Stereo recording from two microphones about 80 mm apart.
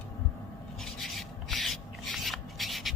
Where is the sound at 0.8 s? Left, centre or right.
Centre.